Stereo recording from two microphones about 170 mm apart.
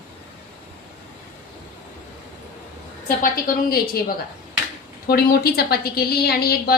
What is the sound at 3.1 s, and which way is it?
Speech, 55° left (ahead or behind).